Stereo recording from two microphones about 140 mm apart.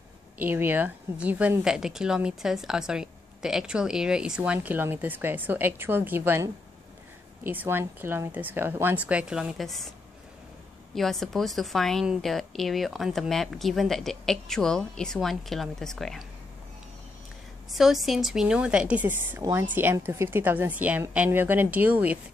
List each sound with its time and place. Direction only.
0.4 s a woman's voice: 15° right (ahead or behind)
11.0 s a woman's voice: centre (ahead or behind)
17.6 s a woman's voice: centre (ahead or behind)